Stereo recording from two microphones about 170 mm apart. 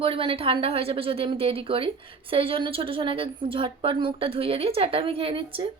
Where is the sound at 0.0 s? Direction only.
30° right (ahead or behind).